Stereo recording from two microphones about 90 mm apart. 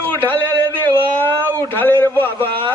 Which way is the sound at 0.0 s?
20° left (ahead or behind).